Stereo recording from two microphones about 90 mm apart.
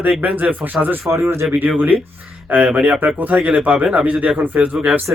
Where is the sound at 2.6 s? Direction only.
15° right (ahead or behind).